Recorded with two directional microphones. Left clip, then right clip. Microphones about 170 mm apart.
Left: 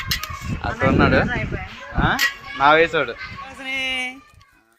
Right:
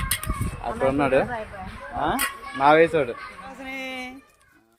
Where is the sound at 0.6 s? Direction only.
10° right (ahead or behind).